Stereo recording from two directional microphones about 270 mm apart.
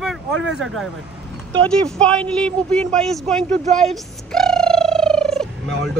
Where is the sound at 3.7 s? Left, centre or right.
Centre.